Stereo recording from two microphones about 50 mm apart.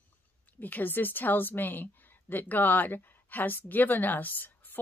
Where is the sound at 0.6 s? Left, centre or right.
Left.